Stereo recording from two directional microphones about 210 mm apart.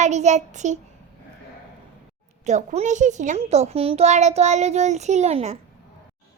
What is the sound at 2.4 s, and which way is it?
A woman's voice, 35° right (ahead or behind).